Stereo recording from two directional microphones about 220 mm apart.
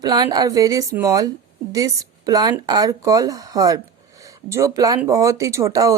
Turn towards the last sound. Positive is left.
turn(degrees=-15)  # may be behind; listen again after turning